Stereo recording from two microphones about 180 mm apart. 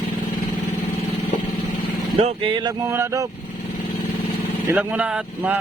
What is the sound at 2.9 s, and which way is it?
Speech, 15° right (ahead or behind).